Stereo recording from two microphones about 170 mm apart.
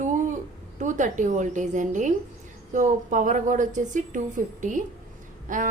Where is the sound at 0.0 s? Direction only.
45° right (ahead or behind).